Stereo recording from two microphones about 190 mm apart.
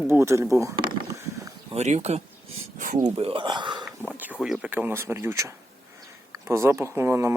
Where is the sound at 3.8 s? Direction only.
10° right (ahead or behind).